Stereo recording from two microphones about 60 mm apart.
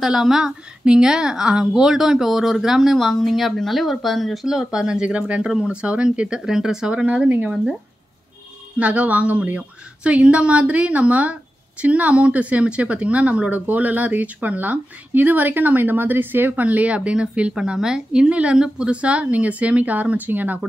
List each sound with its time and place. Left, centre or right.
0.0 s a woman's voice: centre
4.5 s speech: centre; by 7.5 s right
8.7 s speech: right